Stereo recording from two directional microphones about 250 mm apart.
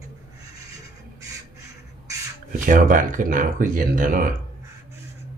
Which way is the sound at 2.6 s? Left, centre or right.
Right.